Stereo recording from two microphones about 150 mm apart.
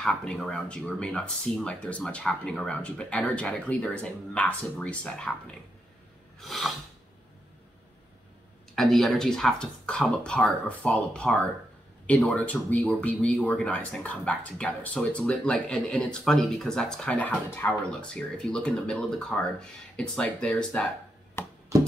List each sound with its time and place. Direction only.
0.0 s speech: 5° left (ahead or behind)
8.7 s speech: centre (ahead or behind)
21.4 s a sound: 15° left (ahead or behind)